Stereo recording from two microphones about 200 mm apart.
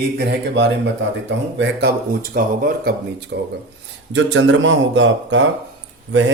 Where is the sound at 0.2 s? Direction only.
60° right (ahead or behind).